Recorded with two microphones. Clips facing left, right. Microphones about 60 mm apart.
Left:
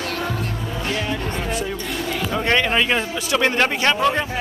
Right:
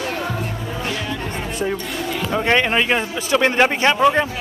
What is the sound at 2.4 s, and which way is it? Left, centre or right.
Speech, centre.